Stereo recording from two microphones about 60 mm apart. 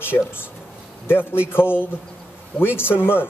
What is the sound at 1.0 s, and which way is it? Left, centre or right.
Speech, left.